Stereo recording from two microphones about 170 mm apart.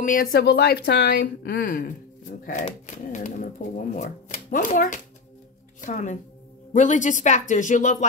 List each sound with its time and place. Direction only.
0.0 s speech: 55° left (ahead or behind)